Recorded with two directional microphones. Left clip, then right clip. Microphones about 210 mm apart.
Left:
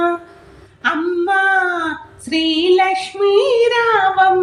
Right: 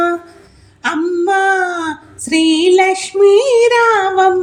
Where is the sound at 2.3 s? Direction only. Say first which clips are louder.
Right 3 dB; 50° right (ahead or behind).